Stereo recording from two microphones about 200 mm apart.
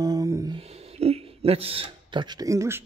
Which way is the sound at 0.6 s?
30° right (ahead or behind).